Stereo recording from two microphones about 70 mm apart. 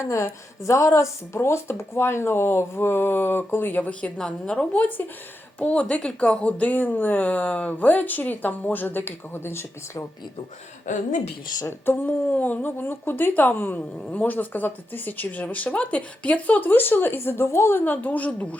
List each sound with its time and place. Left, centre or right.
0.0 s a woman's voice: left
4.2 s a woman's voice: centre; by 10.1 s left
12.0 s speech: left